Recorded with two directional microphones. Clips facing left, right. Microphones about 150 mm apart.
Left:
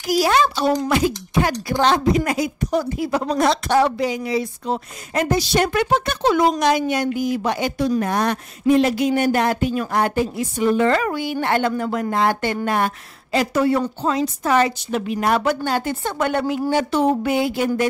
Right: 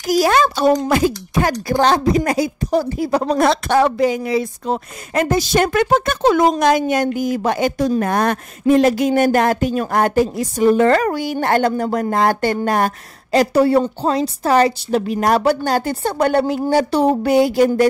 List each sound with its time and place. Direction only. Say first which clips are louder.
0.0 s speech: right 3 dB; 45° right (ahead or behind)
3.3 s speech: right 1 dB; 55° right (ahead or behind); by 17.8 s 40° right (ahead or behind)